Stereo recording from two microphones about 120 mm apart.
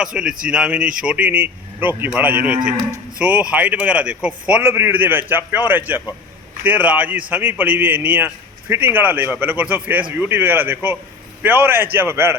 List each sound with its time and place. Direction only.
0.0 s a man's voice: 5° right (ahead or behind)